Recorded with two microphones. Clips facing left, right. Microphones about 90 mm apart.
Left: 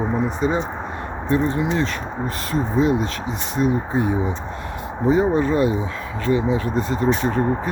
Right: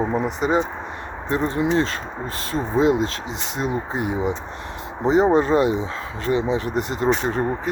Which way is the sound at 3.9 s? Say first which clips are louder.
Left 2 dB; 90° right.